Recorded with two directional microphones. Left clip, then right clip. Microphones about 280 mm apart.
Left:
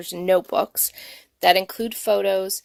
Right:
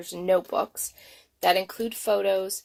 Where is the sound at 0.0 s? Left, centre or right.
Left.